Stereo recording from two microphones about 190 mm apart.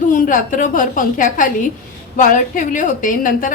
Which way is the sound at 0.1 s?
45° left (ahead or behind).